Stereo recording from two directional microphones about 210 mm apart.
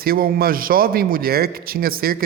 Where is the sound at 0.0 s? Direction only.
45° right (ahead or behind).